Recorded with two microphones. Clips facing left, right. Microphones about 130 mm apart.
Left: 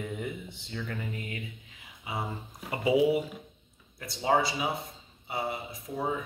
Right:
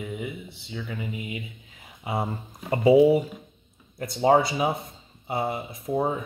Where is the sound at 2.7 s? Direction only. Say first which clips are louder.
Right 8 dB; 40° right (ahead or behind).